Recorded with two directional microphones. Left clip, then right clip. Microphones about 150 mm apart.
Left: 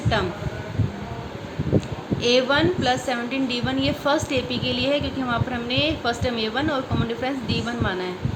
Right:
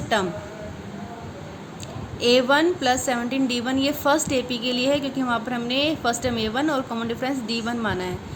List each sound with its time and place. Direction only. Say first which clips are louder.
0.1 s speech: right 1 dB; 50° right (ahead or behind)
2.2 s a woman's voice: right 1 dB; 40° right (ahead or behind)